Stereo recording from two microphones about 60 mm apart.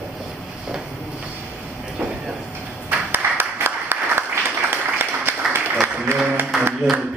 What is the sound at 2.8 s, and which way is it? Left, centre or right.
Applause, right.